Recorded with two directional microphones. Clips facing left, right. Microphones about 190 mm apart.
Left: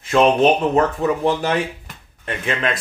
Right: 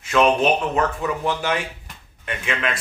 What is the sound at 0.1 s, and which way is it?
Speech, 35° left (ahead or behind).